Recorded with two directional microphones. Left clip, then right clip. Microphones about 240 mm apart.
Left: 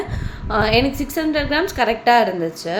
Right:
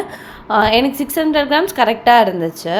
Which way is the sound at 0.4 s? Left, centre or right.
Centre.